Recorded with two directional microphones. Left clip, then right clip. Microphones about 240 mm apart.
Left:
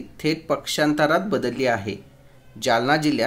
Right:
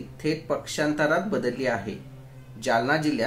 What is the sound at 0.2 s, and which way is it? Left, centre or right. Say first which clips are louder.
Speech: left 4 dB; left.